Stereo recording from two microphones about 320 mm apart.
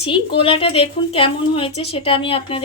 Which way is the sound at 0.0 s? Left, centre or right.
Centre.